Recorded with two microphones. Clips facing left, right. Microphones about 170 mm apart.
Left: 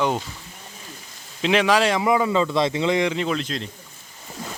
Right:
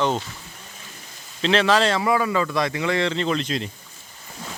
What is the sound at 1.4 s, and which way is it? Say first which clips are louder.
Speech: even; 10° left (ahead or behind).